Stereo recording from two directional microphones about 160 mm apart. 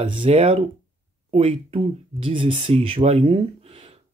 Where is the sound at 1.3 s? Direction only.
35° right (ahead or behind).